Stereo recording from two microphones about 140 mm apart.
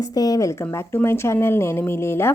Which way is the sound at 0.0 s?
25° left (ahead or behind).